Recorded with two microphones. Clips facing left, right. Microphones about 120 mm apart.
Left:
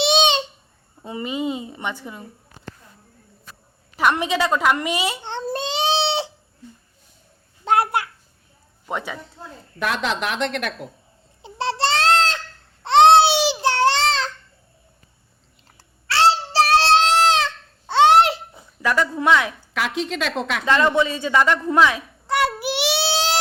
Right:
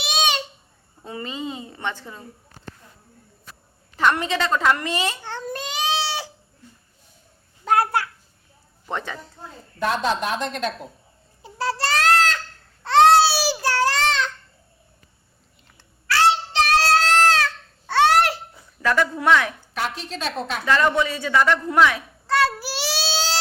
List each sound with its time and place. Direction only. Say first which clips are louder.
0.0 s babbling: left 6 dB; 25° left (ahead or behind)
1.0 s a woman's voice: left 5 dB; 15° left (ahead or behind)
3.9 s a woman's voice: left 1 dB; 15° left (ahead or behind)
5.2 s baby cry: left 4 dB; 25° left (ahead or behind)
7.6 s a sound: left 1 dB; 25° left (ahead or behind)
8.9 s a woman's voice: left 1 dB; 5° left (ahead or behind)
9.7 s a woman's voice: right 1 dB; 90° left; by 10.8 s 70° left (ahead or behind)
11.4 s a sound: left 2 dB; 25° left (ahead or behind)
12.8 s baby cry: left 2 dB; 20° left (ahead or behind)
15.8 s child singing: left 1 dB; 30° left (ahead or behind)
19.2 s a man's voice: left 1 dB; 20° left (ahead or behind)
19.7 s a woman's voice: left 6 dB; 90° left
21.0 s a man's voice: left 1 dB; 20° left (ahead or behind)
21.7 s a sound: left 1 dB; 20° left (ahead or behind)